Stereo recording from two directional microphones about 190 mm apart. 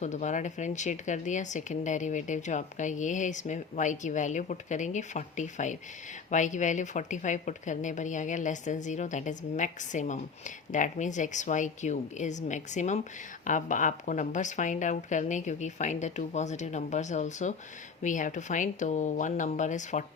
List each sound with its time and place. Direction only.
0.0 s speech: 40° left (ahead or behind)